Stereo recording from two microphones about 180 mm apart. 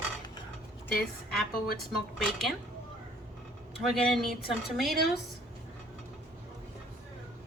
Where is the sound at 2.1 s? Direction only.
Centre (ahead or behind).